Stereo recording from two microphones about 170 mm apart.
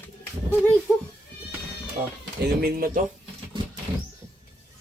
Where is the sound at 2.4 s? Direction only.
65° right (ahead or behind).